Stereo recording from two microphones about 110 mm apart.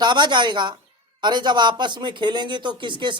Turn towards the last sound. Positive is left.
turn(degrees=-45)  # may be behind; listen again after turning